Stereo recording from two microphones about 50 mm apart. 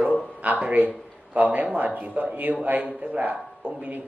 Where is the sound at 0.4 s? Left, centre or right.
Right.